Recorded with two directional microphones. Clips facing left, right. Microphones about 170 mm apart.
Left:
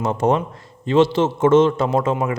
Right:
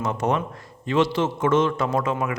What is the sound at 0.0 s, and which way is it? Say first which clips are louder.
A man's voice: left 5 dB; 30° left (ahead or behind).